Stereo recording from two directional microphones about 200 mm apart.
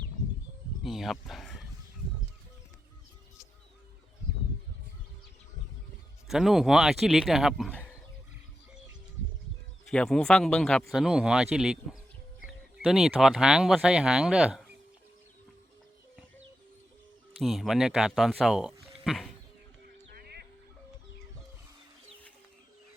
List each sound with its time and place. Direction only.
0.8 s speech: centre (ahead or behind)
6.2 s speech: centre (ahead or behind)
9.9 s speech: 5° left (ahead or behind)
17.4 s speech: centre (ahead or behind)
20.1 s music: 50° right (ahead or behind)